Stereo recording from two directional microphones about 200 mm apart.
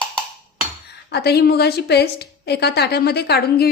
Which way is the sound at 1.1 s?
55° left (ahead or behind).